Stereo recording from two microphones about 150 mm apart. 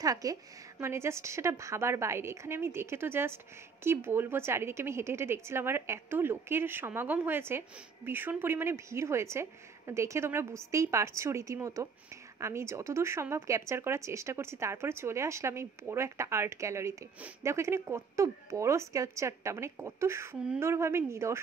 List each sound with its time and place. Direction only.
0.0 s a woman's voice: 25° right (ahead or behind)
20.3 s a woman's voice: 5° right (ahead or behind)
20.6 s a woman's voice: 15° right (ahead or behind)